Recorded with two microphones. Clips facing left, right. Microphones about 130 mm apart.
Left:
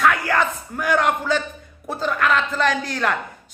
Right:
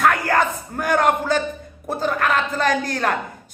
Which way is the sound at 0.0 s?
45° right (ahead or behind).